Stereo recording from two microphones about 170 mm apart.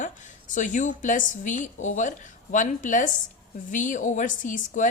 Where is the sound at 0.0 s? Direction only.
50° left (ahead or behind).